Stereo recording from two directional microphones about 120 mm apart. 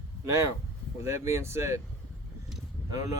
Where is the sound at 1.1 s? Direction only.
25° right (ahead or behind).